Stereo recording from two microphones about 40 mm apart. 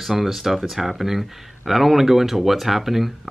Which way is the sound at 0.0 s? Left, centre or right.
Centre.